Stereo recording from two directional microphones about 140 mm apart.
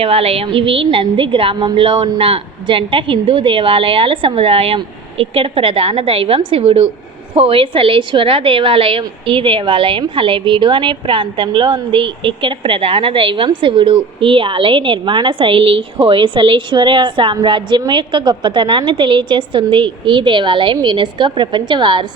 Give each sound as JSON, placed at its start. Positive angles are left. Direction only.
{"t": 0.0, "sound": "a woman's voice", "side_deg": -45}